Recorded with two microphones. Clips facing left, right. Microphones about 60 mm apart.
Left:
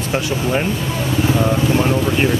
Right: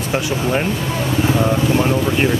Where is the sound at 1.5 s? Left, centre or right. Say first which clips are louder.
Even; centre.